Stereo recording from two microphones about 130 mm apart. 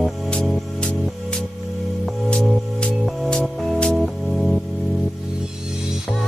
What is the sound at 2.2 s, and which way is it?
Music, 5° left (ahead or behind).